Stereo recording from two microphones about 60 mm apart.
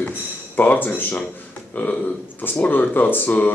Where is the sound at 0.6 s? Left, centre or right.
Left.